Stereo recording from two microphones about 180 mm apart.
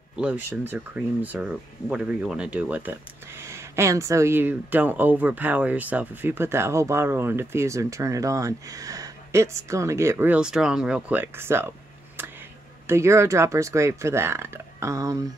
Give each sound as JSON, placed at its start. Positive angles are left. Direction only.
{"t": 0.1, "sound": "speech", "side_deg": -5}
{"t": 12.2, "sound": "a sound", "side_deg": -10}
{"t": 12.8, "sound": "speech", "side_deg": -15}